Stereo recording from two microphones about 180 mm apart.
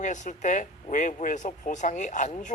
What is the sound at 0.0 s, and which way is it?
Speech, 45° left (ahead or behind).